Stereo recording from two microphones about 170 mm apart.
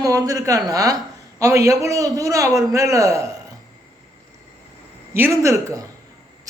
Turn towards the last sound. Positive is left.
turn(degrees=-15)  # may be behind; listen again after turning